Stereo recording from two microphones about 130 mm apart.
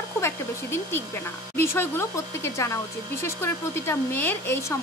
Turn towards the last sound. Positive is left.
turn(degrees=20)  # may be behind; listen again after turning